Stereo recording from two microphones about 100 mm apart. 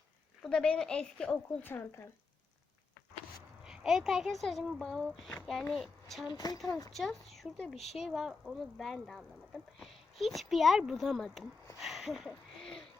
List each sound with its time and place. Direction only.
0.4 s a woman's voice: 10° left (ahead or behind)
1.7 s speech: 25° left (ahead or behind)
3.6 s speech: 5° right (ahead or behind)
6.3 s speech: 40° left (ahead or behind)
6.9 s speech: centre (ahead or behind)
12.6 s a sound: 5° left (ahead or behind)